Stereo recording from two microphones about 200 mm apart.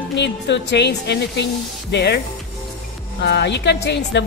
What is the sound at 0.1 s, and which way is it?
A woman's voice, 60° left (ahead or behind).